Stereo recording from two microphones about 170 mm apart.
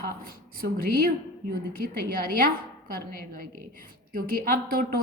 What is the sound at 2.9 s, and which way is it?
A woman's voice, 55° right (ahead or behind).